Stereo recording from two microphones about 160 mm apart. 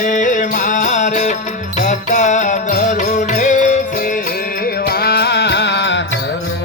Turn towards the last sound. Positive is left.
turn(degrees=90)